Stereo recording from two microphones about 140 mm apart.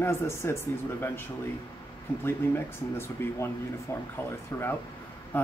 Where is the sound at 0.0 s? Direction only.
20° left (ahead or behind).